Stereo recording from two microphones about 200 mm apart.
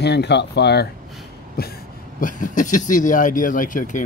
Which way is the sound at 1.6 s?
50° left (ahead or behind).